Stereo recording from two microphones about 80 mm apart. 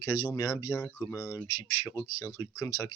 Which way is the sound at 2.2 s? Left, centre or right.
Left.